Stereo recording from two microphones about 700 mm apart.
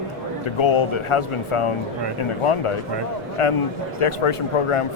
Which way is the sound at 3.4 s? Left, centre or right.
Left.